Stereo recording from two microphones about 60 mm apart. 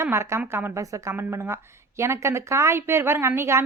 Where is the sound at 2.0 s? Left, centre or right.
Right.